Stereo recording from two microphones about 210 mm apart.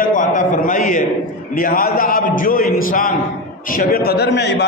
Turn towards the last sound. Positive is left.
turn(degrees=55)  # may be behind; listen again after turning